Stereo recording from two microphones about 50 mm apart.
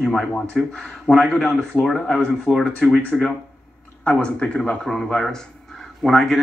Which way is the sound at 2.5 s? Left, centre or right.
Left.